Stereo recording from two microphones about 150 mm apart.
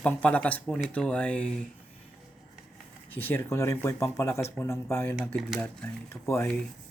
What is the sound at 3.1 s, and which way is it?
Speech, 15° left (ahead or behind).